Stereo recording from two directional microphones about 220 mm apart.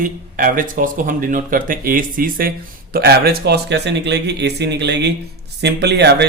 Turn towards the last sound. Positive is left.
turn(degrees=-50)  # may be behind; listen again after turning